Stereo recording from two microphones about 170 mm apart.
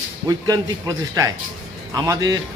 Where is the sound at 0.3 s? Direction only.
20° right (ahead or behind).